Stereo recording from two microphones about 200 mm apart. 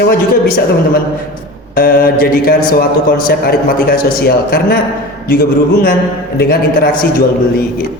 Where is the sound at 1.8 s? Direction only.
45° left (ahead or behind).